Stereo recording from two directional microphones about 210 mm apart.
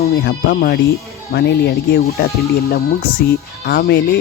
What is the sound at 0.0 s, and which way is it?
Speech, 50° left (ahead or behind).